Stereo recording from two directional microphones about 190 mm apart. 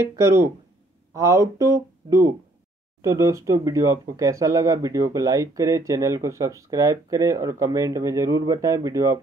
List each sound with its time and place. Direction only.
0.0 s speech: 15° right (ahead or behind)